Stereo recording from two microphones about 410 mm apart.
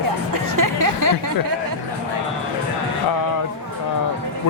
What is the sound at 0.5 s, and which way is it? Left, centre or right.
Speech, right.